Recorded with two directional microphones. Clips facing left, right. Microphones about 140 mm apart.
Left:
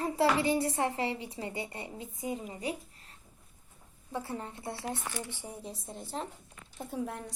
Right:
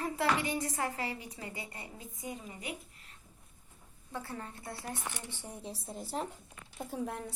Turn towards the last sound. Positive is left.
turn(degrees=0)  # may be behind; listen again after turning